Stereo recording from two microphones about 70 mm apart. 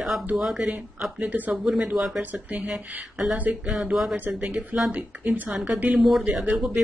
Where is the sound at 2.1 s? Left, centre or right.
Right.